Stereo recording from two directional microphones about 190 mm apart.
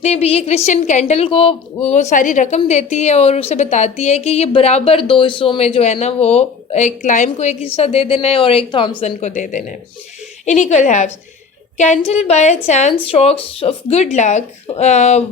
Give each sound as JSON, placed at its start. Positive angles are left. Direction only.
{"t": 0.0, "sound": "a woman's voice", "side_deg": 35}